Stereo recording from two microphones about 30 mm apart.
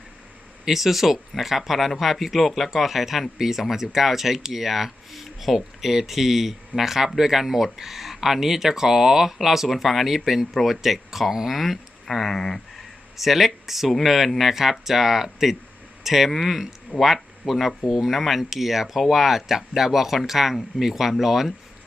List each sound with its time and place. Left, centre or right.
0.7 s speech: centre
12.0 s speech: centre
13.1 s speech: centre
16.9 s speech: left
17.5 s speech: centre